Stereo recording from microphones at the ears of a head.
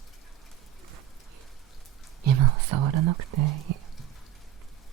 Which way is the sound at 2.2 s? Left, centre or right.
Right.